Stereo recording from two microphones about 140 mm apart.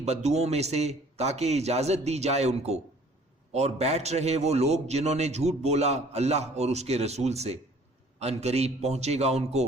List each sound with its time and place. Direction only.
0.0 s a man's voice: 50° right (ahead or behind)